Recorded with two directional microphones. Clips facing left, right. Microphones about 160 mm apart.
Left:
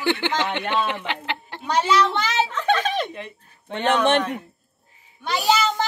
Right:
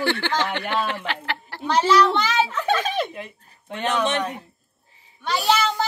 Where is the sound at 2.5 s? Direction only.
5° right (ahead or behind).